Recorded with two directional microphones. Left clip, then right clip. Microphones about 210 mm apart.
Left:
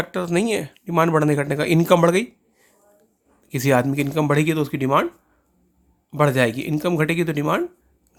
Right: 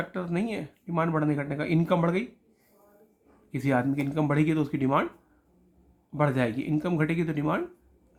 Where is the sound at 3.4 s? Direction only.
45° left (ahead or behind).